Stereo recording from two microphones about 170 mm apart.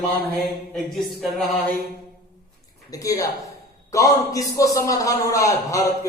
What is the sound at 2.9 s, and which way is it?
A man's voice, 20° left (ahead or behind).